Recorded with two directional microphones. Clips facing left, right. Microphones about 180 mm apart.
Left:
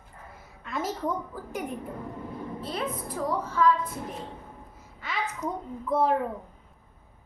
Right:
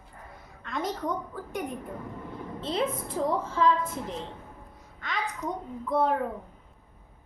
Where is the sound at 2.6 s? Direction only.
25° right (ahead or behind).